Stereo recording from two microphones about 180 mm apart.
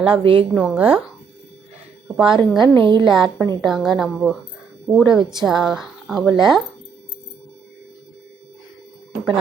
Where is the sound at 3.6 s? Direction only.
Centre (ahead or behind).